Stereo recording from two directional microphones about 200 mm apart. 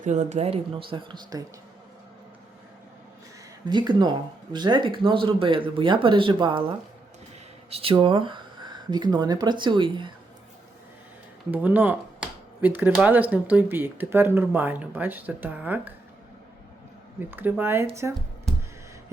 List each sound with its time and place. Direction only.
0.0 s speech: 35° right (ahead or behind); by 1.5 s 20° right (ahead or behind)
3.7 s speech: 20° right (ahead or behind)
11.5 s speech: 10° right (ahead or behind)
17.2 s speech: 10° right (ahead or behind)